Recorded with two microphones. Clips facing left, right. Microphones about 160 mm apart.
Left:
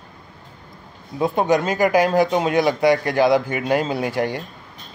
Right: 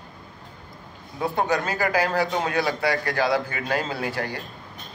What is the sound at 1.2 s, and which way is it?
Speech, 15° left (ahead or behind).